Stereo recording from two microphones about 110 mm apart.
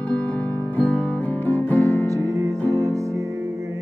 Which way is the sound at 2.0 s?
30° right (ahead or behind).